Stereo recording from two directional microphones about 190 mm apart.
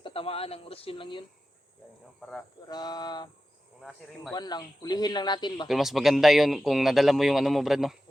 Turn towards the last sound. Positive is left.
turn(degrees=0)  # may be behind; listen again after turning